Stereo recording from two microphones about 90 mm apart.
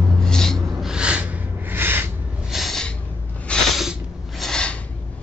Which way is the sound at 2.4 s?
Centre (ahead or behind).